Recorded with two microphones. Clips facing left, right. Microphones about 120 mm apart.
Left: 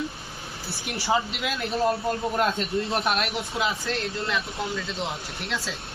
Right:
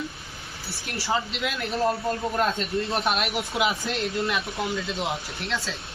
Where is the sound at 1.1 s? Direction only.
5° left (ahead or behind).